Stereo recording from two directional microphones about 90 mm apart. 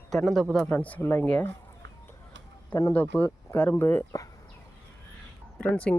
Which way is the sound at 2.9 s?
20° left (ahead or behind).